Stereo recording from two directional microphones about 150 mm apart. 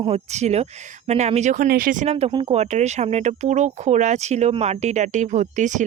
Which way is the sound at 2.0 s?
40° right (ahead or behind).